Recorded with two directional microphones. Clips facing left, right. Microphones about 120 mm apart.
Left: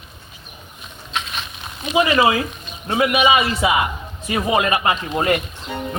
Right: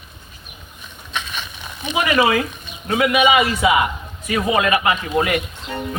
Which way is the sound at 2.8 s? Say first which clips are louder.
Right 1 dB; 30° left (ahead or behind).